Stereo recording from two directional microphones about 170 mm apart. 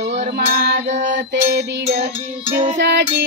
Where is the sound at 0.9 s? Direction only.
45° right (ahead or behind).